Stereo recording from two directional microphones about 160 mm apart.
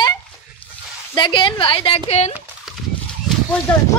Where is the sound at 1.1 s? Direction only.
30° left (ahead or behind).